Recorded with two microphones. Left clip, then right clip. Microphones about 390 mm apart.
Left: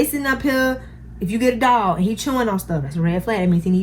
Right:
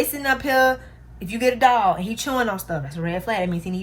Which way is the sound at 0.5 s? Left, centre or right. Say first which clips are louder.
Right 5 dB; right.